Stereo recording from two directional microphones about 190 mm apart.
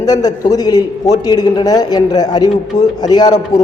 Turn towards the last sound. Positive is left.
turn(degrees=20)  # may be behind; listen again after turning